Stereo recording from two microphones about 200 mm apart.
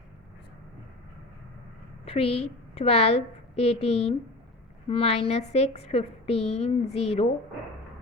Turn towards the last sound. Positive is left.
turn(degrees=30)  # may be behind; listen again after turning